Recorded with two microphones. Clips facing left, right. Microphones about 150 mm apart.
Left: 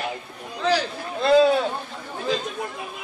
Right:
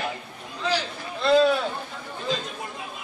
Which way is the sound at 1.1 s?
45° left (ahead or behind).